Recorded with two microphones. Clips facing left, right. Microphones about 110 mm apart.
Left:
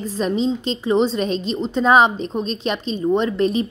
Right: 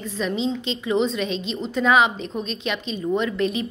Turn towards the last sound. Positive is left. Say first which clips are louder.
# left 4 dB
turn(degrees=35)  # may be behind; listen again after turning